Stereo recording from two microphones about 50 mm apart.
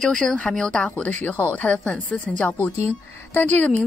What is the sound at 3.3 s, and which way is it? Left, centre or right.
Speech, left.